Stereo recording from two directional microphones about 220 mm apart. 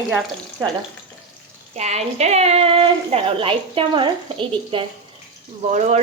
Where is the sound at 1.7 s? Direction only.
30° right (ahead or behind).